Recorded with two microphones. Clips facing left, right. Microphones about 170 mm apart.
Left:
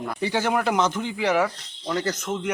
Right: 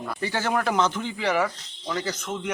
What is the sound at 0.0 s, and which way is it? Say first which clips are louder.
Speech: left 3 dB; 15° left (ahead or behind).